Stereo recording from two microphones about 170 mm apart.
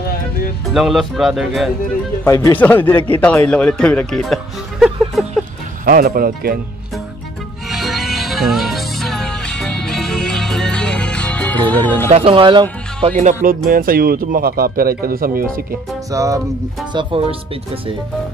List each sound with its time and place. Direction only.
0.7 s speech: centre (ahead or behind)
2.2 s speech: 20° left (ahead or behind); by 5.2 s centre (ahead or behind)
5.9 s speech: 55° right (ahead or behind)
7.6 s music: centre (ahead or behind)
12.1 s speech: 35° right (ahead or behind)
13.2 s music: 50° right (ahead or behind)
13.7 s speech: 60° right (ahead or behind)
16.1 s music: 20° right (ahead or behind)
16.9 s speech: 30° right (ahead or behind)